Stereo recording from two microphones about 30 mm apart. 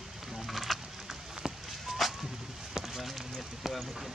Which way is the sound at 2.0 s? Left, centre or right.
Centre.